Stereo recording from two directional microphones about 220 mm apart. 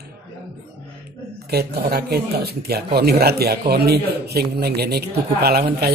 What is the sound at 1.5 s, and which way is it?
Speech, 45° right (ahead or behind).